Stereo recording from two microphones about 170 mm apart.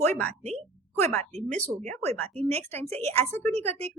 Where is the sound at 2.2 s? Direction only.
40° right (ahead or behind).